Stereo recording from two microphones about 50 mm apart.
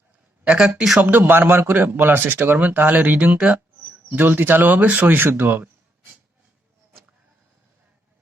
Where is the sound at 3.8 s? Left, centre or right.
Right.